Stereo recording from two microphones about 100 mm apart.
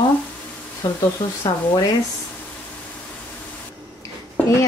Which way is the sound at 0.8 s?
45° left (ahead or behind).